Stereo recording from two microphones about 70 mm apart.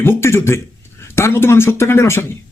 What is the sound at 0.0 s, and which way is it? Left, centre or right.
A man's voice, left.